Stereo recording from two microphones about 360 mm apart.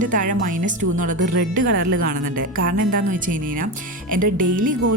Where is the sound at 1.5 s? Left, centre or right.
Right.